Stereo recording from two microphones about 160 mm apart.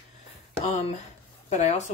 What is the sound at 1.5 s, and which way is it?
Speech, 45° left (ahead or behind).